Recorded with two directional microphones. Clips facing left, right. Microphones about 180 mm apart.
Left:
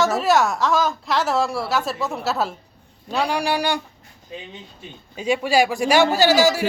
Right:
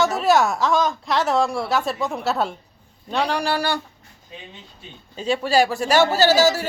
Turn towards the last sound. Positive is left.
turn(degrees=10)  # may be behind; listen again after turning